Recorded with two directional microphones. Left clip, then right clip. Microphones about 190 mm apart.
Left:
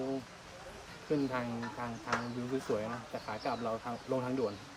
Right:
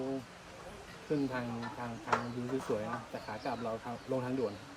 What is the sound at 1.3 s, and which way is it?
Speech, 5° left (ahead or behind).